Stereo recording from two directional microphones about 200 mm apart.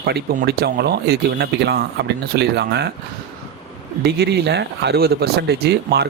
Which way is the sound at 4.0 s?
55° right (ahead or behind).